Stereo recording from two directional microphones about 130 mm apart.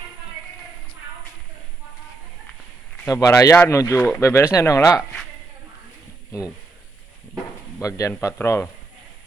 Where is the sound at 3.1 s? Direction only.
25° left (ahead or behind).